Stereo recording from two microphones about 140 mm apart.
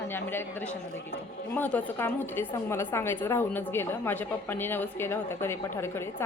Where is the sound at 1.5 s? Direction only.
15° left (ahead or behind).